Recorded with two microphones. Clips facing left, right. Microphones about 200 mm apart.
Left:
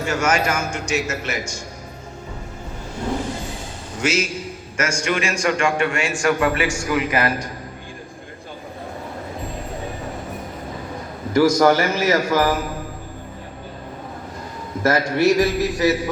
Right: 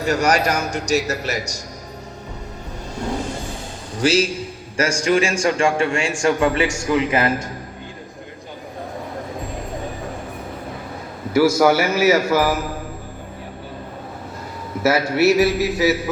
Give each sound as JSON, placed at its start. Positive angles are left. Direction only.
{"t": 0.0, "sound": "a man's voice", "side_deg": -35}
{"t": 4.0, "sound": "a man's voice", "side_deg": -35}
{"t": 11.3, "sound": "a man's voice", "side_deg": -10}
{"t": 14.8, "sound": "a man's voice", "side_deg": -5}